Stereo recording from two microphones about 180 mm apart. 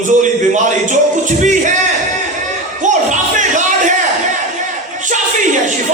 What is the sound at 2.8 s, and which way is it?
Music, 45° right (ahead or behind).